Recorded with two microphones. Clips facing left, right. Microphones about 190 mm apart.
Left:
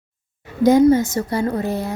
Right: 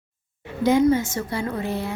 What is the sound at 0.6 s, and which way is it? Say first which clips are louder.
A woman's voice: left 5 dB; 40° left (ahead or behind).